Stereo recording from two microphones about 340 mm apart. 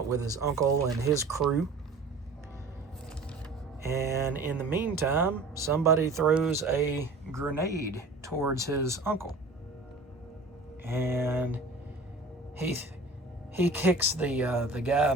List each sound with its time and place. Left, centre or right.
0.1 s speech: centre
3.8 s speech: centre
10.8 s speech: centre
13.6 s speech: centre